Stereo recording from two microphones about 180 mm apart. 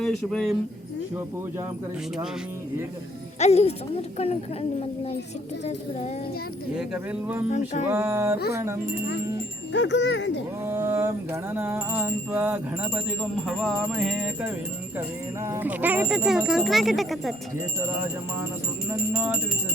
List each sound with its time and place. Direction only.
0.0 s speech: centre (ahead or behind)
3.3 s speech: 35° left (ahead or behind)
6.7 s music: 5° right (ahead or behind)
9.7 s speech: 80° left
10.7 s music: 15° right (ahead or behind)
15.4 s speech: 10° right (ahead or behind)
18.9 s speech: 10° right (ahead or behind)